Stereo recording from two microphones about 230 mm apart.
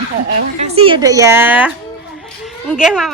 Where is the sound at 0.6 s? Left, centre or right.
Right; by 1.7 s centre.